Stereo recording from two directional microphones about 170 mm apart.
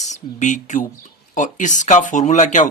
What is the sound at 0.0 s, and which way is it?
Speech, 45° left (ahead or behind).